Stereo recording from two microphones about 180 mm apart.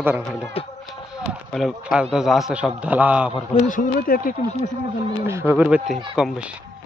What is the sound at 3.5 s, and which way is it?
Speech, 45° left (ahead or behind).